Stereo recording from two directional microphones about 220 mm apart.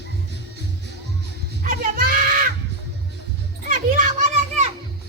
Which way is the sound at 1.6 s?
40° right (ahead or behind).